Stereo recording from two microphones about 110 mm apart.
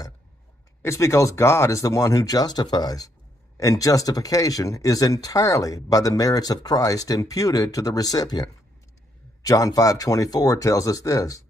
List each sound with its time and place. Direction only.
0.8 s speech: 25° left (ahead or behind)
9.5 s speech: 35° left (ahead or behind)